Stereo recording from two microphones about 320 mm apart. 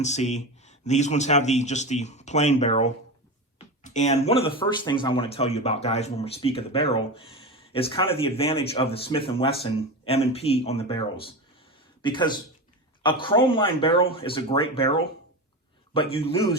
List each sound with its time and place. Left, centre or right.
0.0 s speech: left
12.0 s speech: centre